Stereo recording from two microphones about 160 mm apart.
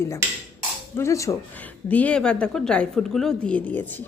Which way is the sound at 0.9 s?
20° left (ahead or behind).